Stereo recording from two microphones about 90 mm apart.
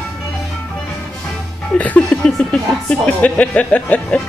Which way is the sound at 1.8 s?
15° left (ahead or behind).